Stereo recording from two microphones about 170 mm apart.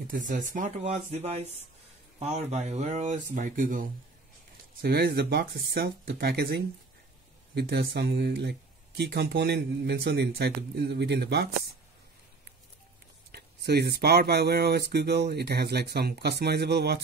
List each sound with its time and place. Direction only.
0.1 s speech: 50° right (ahead or behind)
4.8 s speech: 70° right (ahead or behind)
13.3 s speech: 70° right (ahead or behind)